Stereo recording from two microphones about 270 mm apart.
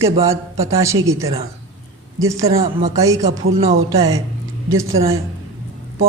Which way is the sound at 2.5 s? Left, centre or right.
Right.